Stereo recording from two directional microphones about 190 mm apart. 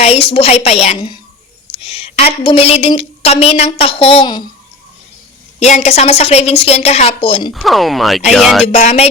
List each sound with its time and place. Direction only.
0.0 s a woman's voice: 30° left (ahead or behind)
5.5 s a woman's voice: 35° left (ahead or behind)
7.5 s speech: centre (ahead or behind)
8.6 s a woman's voice: 35° left (ahead or behind)